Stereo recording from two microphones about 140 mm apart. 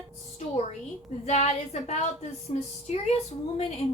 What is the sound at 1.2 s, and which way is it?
Speech, 55° left (ahead or behind).